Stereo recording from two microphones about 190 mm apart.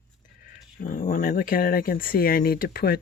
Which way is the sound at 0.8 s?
45° left (ahead or behind).